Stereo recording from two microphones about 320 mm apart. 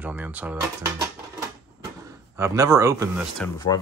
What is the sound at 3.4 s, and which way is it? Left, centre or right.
Speech, centre.